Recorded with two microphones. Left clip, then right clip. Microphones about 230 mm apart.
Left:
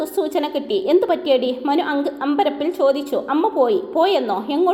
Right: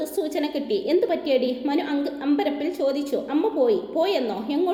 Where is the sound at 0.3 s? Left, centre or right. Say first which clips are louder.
Left 5 dB; left.